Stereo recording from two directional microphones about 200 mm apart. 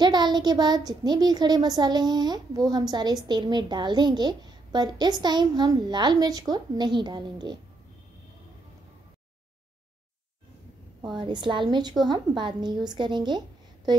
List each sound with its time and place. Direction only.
0.0 s a child's voice: 20° right (ahead or behind)
11.1 s a child's voice: 25° right (ahead or behind)